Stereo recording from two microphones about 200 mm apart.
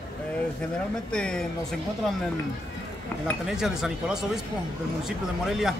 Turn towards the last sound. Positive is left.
turn(degrees=0)  # may be behind; listen again after turning